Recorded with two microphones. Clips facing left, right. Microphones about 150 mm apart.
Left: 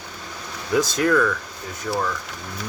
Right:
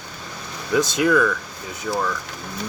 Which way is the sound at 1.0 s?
5° right (ahead or behind).